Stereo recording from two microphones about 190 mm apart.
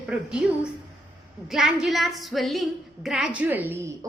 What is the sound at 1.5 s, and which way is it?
A woman's voice, centre (ahead or behind).